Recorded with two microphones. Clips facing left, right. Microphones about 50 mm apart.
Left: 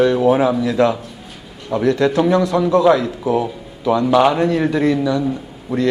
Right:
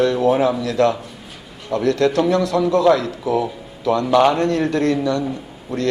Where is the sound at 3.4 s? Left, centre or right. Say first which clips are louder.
Left 1 dB; centre.